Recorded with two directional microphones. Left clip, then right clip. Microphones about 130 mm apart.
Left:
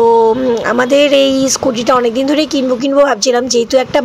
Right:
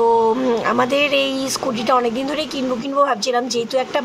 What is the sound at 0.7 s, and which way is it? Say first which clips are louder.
Speech: left 8 dB; 35° left (ahead or behind).